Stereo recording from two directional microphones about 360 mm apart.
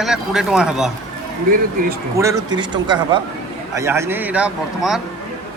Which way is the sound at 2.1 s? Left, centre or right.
Centre.